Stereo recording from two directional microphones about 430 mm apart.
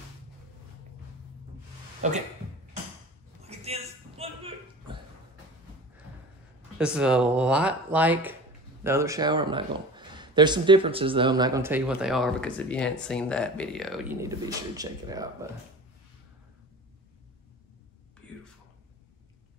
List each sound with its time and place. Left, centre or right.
2.0 s speech: centre
3.4 s a sound: centre
6.8 s speech: centre
18.2 s whispering: centre